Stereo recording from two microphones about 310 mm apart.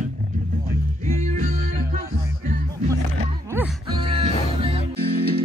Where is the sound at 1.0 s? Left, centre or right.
Right.